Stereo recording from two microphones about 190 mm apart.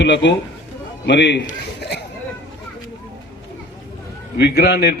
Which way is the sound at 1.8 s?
60° left (ahead or behind).